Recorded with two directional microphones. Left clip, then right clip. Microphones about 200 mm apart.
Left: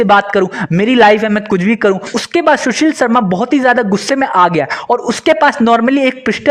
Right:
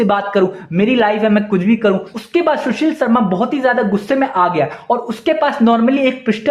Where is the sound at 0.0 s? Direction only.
45° left (ahead or behind).